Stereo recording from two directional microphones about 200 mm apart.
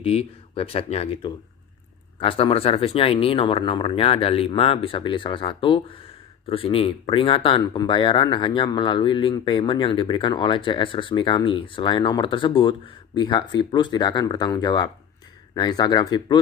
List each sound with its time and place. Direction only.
0.0 s speech: 30° left (ahead or behind)